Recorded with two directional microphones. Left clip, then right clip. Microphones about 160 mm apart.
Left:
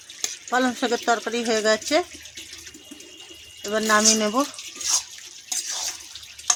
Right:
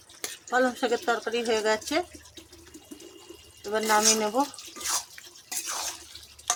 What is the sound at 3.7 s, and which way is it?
Speech, 75° left (ahead or behind).